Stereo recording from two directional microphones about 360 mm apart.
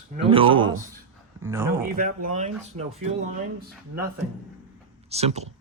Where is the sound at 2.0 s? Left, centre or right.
Right.